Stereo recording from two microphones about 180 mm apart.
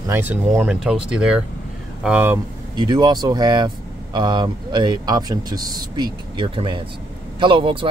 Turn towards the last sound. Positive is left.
turn(degrees=-30)  # may be behind; listen again after turning